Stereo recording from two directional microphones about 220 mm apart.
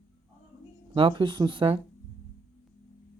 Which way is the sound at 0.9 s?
20° right (ahead or behind).